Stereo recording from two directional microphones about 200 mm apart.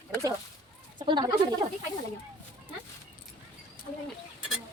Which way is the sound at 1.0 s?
20° right (ahead or behind).